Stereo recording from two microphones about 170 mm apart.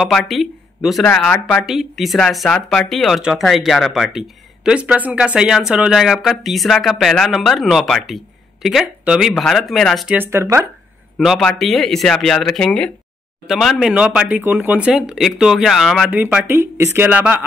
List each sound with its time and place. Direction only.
0.0 s speech: centre (ahead or behind)
10.1 s speech: 15° right (ahead or behind)
11.1 s speech: centre (ahead or behind)